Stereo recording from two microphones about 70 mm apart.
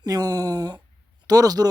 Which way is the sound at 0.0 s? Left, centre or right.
Right.